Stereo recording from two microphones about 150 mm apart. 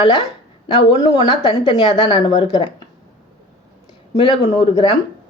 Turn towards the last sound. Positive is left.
turn(degrees=40)  # may be behind; listen again after turning